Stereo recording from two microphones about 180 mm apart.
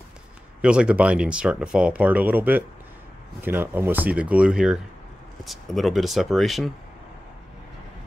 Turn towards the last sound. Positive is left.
turn(degrees=0)  # may be behind; listen again after turning